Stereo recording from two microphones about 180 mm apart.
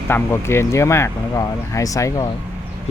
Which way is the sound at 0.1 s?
15° left (ahead or behind).